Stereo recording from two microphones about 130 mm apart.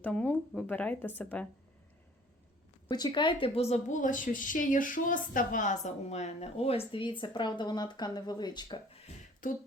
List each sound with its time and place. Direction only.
0.0 s speech: 10° left (ahead or behind)
2.9 s a woman's voice: 35° left (ahead or behind)
3.4 s speech: 50° left (ahead or behind)
9.4 s beatboxing: 90° left